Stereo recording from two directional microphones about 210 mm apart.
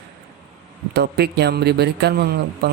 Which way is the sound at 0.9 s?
50° right (ahead or behind).